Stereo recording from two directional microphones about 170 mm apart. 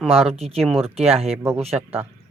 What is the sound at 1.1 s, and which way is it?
Speech, 35° right (ahead or behind).